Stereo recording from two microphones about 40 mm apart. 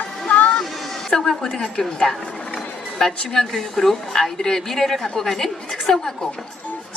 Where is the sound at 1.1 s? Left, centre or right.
Centre.